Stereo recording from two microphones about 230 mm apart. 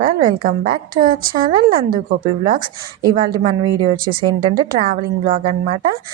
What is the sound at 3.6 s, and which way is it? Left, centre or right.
Speech, centre.